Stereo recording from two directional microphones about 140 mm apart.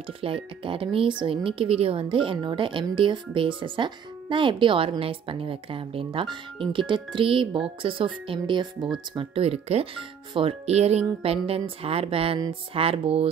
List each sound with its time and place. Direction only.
0.0 s speech: 40° right (ahead or behind)